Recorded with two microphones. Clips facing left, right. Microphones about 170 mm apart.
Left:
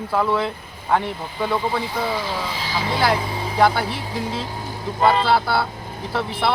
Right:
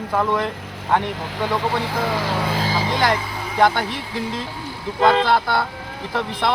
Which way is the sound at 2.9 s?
5° left (ahead or behind).